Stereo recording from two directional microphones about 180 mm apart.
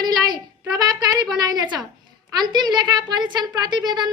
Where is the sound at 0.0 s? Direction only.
20° right (ahead or behind).